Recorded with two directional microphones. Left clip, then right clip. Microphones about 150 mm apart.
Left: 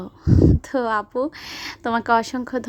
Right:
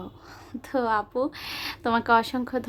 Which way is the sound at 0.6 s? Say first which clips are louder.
Left 3 dB; 35° left (ahead or behind).